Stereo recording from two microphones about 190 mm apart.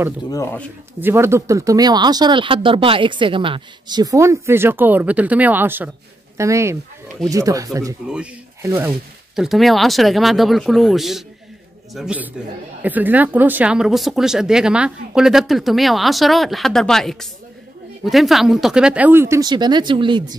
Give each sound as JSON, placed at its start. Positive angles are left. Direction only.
{"t": 0.3, "sound": "speech", "side_deg": 15}
{"t": 1.0, "sound": "speech", "side_deg": -15}
{"t": 9.3, "sound": "speech", "side_deg": 0}